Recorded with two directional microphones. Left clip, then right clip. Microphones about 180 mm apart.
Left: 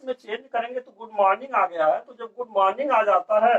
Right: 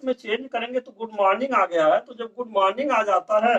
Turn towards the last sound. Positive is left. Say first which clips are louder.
# left 1 dB
turn(degrees=-20)  # may be behind; listen again after turning